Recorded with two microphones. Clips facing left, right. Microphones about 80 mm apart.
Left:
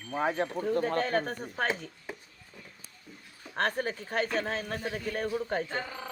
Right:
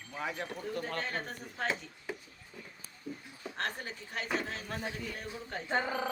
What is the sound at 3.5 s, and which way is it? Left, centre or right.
Speech, left.